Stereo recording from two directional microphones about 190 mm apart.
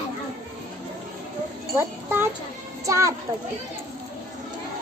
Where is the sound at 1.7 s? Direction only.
10° right (ahead or behind).